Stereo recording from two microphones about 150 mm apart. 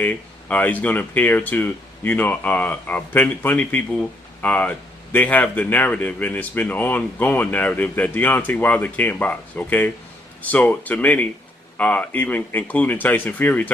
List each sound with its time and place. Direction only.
0.0 s speech: 10° left (ahead or behind)